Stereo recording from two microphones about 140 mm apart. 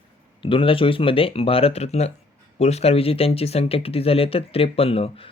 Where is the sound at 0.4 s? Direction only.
40° left (ahead or behind).